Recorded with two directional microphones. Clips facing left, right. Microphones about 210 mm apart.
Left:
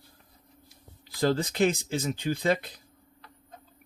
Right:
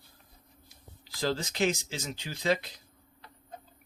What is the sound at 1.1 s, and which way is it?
Speech, 55° left (ahead or behind).